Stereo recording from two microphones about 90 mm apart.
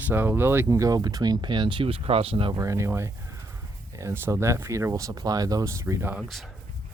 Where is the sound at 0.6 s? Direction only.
40° right (ahead or behind); by 2.5 s 90° right.